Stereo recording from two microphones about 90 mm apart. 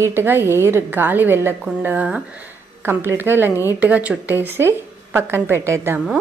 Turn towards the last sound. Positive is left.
turn(degrees=-30)  # may be behind; listen again after turning